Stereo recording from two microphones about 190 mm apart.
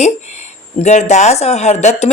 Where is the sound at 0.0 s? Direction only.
35° left (ahead or behind).